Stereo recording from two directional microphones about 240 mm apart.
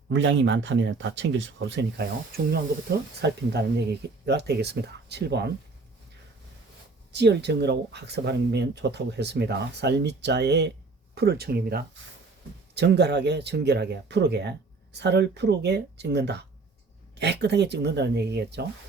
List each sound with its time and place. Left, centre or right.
0.1 s speech: right
7.1 s speech: right